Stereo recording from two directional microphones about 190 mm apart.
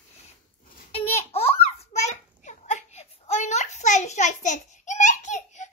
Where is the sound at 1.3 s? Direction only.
30° left (ahead or behind).